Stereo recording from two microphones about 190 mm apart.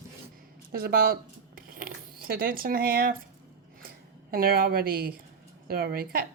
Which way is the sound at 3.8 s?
50° right (ahead or behind).